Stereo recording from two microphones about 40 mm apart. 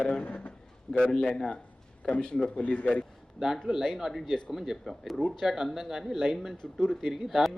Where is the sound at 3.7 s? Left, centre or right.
Centre.